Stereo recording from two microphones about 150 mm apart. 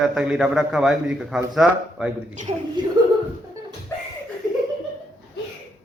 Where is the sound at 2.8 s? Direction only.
30° right (ahead or behind).